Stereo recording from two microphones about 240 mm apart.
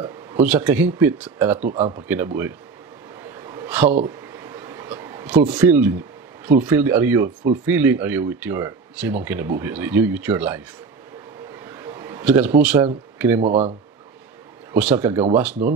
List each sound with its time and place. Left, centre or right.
0.4 s speech: centre
1.6 s speech: right
2.0 s speech: centre
3.3 s a sound: centre
5.6 s speech: centre
11.5 s a sound: centre
13.4 s speech: right
14.7 s speech: centre